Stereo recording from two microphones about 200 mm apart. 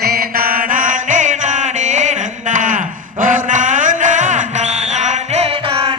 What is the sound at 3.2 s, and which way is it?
Music, 40° right (ahead or behind).